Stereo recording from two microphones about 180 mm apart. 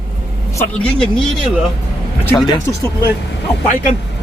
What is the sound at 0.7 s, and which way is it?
Speech, 5° left (ahead or behind).